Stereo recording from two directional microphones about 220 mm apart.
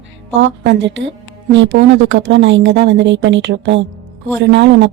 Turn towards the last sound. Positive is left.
turn(degrees=-55)  # may be behind; listen again after turning